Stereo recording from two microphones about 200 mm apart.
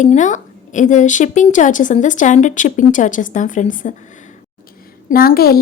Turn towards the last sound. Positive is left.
turn(degrees=50)  # may be behind; listen again after turning